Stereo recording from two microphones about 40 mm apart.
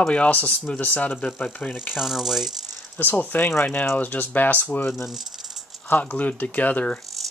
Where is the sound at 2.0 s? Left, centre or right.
Centre.